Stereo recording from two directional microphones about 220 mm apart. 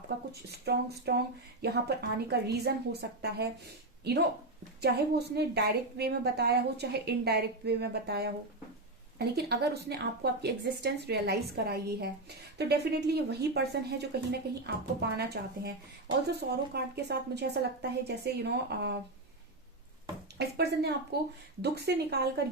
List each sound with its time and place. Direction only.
0.5 s a woman's voice: 50° right (ahead or behind)
4.8 s a woman's voice: 50° right (ahead or behind)
20.4 s a woman's voice: 45° right (ahead or behind)